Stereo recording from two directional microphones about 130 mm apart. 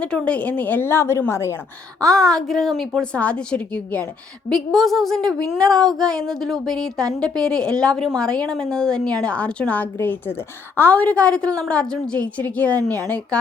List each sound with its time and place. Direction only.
0.0 s a woman's voice: 10° left (ahead or behind)
2.0 s a woman's voice: 25° right (ahead or behind)
2.3 s a woman's voice: centre (ahead or behind)